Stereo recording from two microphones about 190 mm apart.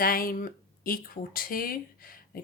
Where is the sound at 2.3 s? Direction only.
50° left (ahead or behind).